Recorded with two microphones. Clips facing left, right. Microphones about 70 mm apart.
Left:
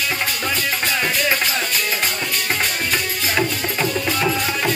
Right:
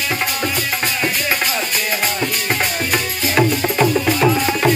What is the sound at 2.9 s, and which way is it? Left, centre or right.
Music, centre.